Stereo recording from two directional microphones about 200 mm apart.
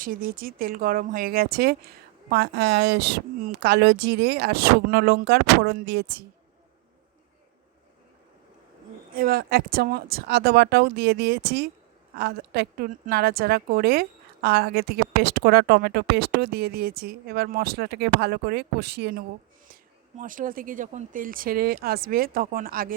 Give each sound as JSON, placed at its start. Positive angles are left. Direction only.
{"t": 0.0, "sound": "a woman's voice", "side_deg": -45}
{"t": 9.1, "sound": "a woman's voice", "side_deg": -50}
{"t": 19.7, "sound": "a woman's voice", "side_deg": -40}